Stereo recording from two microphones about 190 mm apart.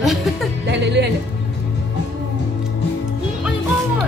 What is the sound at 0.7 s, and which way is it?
Speech, 65° right (ahead or behind).